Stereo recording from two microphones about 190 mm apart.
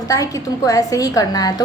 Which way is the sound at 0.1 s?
20° left (ahead or behind).